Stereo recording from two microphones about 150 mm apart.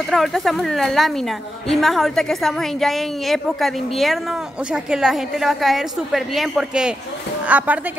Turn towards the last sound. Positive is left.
turn(degrees=-10)  # may be behind; listen again after turning